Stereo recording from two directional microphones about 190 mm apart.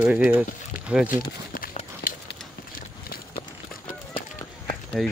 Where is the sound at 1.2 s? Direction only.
50° left (ahead or behind).